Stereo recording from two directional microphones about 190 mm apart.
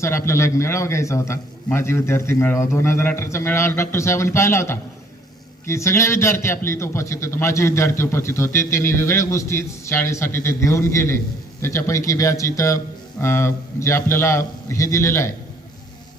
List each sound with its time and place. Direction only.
0.3 s a man's voice: 15° left (ahead or behind)